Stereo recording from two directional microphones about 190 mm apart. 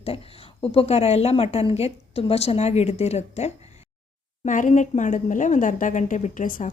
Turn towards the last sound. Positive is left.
turn(degrees=45)  # may be behind; listen again after turning